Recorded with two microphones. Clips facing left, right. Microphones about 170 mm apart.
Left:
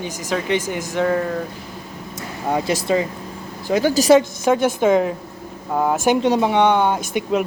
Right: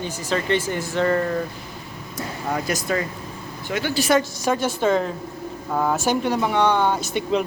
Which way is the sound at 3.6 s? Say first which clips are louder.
Left 7 dB; 40° left (ahead or behind).